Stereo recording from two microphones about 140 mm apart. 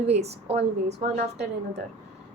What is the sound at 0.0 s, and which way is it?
Speech, 50° right (ahead or behind).